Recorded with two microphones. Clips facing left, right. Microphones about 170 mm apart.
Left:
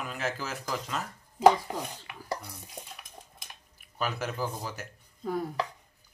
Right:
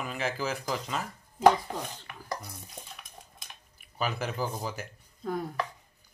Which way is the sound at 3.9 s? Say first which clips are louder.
Right 1 dB; centre (ahead or behind).